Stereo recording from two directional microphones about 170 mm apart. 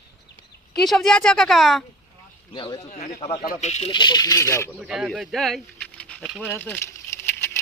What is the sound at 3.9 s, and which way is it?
Speech, 25° left (ahead or behind).